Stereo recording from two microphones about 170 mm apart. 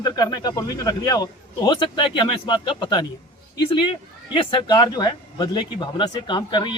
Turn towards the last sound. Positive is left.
turn(degrees=25)  # may be behind; listen again after turning